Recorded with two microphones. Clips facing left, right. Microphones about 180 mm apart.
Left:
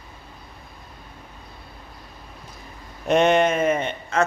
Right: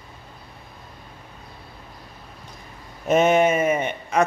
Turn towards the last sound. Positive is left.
turn(degrees=-10)  # may be behind; listen again after turning